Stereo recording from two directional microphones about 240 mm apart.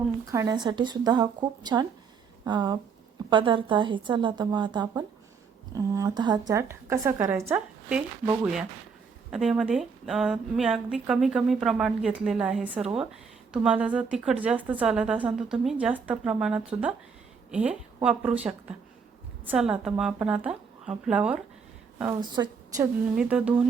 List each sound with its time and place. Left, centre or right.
0.3 s a woman's voice: centre
23.1 s a woman's voice: centre